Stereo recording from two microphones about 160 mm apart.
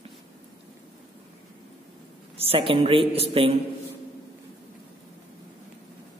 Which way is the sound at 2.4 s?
35° right (ahead or behind).